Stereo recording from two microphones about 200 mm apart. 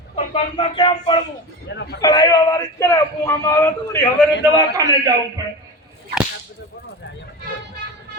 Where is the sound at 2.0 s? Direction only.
20° left (ahead or behind).